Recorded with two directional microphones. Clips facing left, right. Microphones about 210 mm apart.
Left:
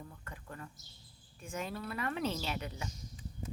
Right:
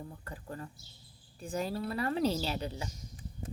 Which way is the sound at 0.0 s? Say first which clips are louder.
Right 5 dB; 30° right (ahead or behind).